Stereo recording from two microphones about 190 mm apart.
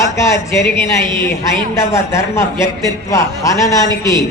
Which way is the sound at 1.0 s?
25° right (ahead or behind).